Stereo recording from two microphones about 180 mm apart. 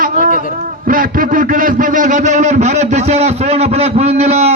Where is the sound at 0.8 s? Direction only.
50° right (ahead or behind).